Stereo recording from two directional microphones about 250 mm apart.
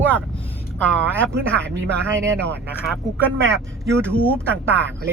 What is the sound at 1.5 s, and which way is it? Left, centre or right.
Speech, centre.